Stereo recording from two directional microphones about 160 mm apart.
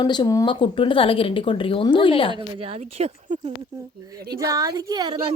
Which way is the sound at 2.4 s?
35° right (ahead or behind).